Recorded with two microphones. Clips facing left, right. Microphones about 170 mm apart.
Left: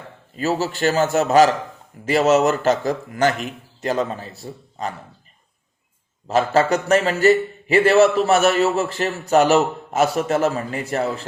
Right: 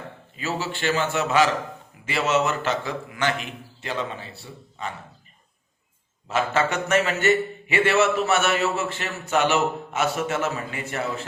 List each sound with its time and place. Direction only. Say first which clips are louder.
0.3 s a man's voice: left 7 dB; 40° left (ahead or behind)
6.2 s a man's voice: left 6 dB; 35° left (ahead or behind)